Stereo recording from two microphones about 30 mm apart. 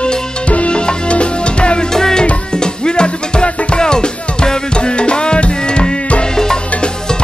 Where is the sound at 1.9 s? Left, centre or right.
Centre.